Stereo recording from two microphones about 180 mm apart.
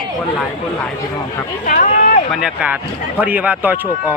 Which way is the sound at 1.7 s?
50° left (ahead or behind).